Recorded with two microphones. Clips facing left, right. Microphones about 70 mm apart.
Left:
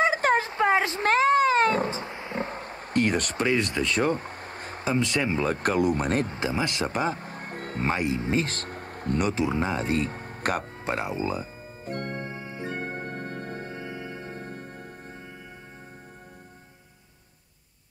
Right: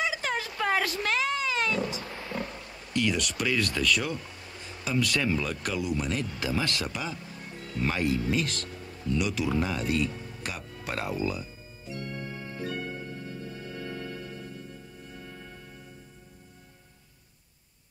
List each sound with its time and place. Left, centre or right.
0.0 s a sound: left
1.0 s cat: left
4.8 s speech: left
6.9 s a sound: left
7.8 s speech: left
9.3 s speech: left
10.8 s speech: left
11.8 s music: left
13.7 s music: left
14.3 s music: left